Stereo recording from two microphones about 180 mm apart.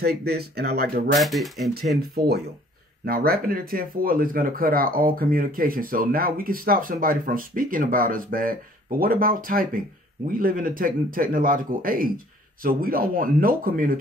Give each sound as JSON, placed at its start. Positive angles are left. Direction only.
{"t": 0.0, "sound": "speech", "side_deg": -60}
{"t": 1.1, "sound": "speech", "side_deg": 0}
{"t": 2.1, "sound": "speech", "side_deg": -60}